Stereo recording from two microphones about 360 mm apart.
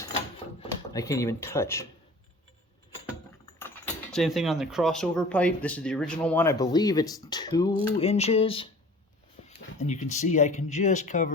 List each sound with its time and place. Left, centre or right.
0.6 s speech: centre
3.6 s speech: centre
9.7 s speech: centre